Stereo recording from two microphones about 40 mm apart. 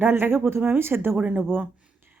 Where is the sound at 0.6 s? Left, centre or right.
Right.